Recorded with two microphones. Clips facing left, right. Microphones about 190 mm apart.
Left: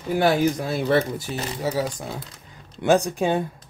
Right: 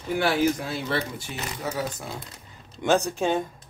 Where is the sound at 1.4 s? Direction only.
30° left (ahead or behind).